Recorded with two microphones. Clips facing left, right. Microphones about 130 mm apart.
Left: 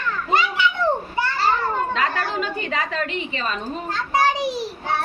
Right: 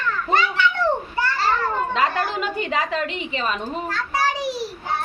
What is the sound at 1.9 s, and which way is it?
A woman's voice, 25° right (ahead or behind).